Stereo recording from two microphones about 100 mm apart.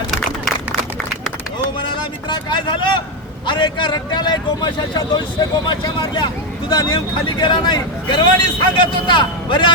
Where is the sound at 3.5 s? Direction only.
50° left (ahead or behind).